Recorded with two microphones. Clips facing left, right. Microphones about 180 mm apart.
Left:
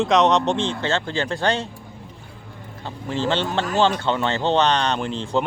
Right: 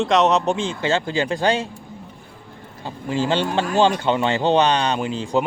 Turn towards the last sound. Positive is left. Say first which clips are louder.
# right 1 dB
turn(degrees=-10)  # may be behind; listen again after turning